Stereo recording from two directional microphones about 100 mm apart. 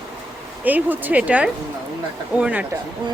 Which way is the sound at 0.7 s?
15° right (ahead or behind).